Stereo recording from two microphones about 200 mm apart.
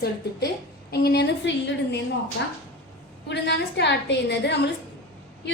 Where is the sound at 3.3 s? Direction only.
60° left (ahead or behind).